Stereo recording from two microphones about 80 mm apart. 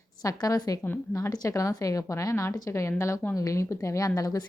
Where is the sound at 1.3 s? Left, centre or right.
Left.